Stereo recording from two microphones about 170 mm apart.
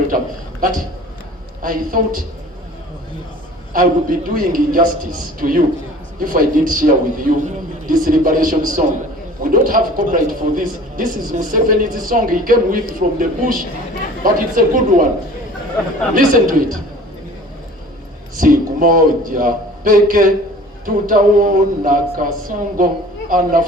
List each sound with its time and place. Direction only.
1.6 s a man's voice: 55° right (ahead or behind)
3.7 s a man's voice: 55° right (ahead or behind)
16.1 s a man's voice: 55° right (ahead or behind)
18.3 s a man's voice: 55° right (ahead or behind)